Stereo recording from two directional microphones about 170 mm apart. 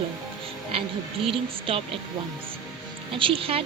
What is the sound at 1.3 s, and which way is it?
Speech, 30° right (ahead or behind).